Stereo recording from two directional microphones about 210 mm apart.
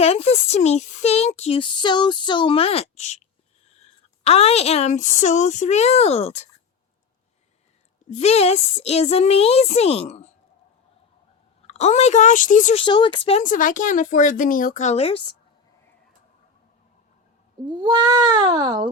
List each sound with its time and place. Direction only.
0.0 s speech: 30° left (ahead or behind)
8.1 s speech: 30° left (ahead or behind)
11.6 s speech: 30° left (ahead or behind)
12.8 s speech: 25° left (ahead or behind)
17.7 s speech: 20° right (ahead or behind)